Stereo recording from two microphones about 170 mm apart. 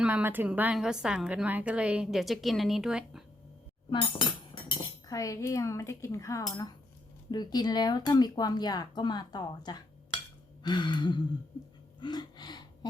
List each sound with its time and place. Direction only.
0.0 s a woman's voice: 10° right (ahead or behind)
3.8 s speech: 30° left (ahead or behind)
11.9 s gasp: 25° left (ahead or behind)